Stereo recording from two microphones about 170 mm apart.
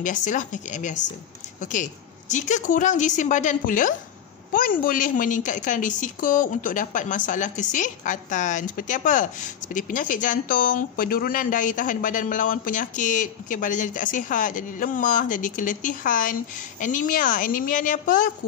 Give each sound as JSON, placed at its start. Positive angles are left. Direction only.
{"t": 0.0, "sound": "a woman's voice", "side_deg": 50}